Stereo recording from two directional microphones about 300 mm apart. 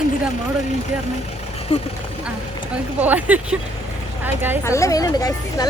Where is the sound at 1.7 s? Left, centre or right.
Centre.